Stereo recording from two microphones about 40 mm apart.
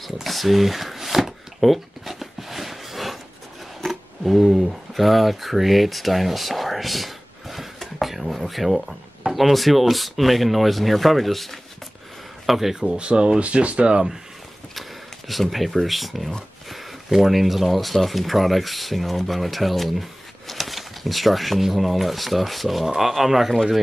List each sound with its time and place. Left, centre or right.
0.0 s a sound: centre
3.8 s speech: centre
12.9 s speech: right
14.8 s speech: centre